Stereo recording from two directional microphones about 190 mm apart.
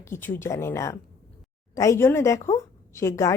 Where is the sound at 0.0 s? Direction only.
15° left (ahead or behind).